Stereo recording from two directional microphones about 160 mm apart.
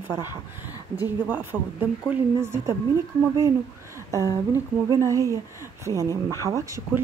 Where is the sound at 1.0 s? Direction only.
10° right (ahead or behind).